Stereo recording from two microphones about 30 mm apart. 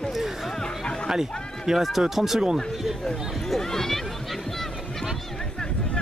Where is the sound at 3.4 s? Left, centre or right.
Centre.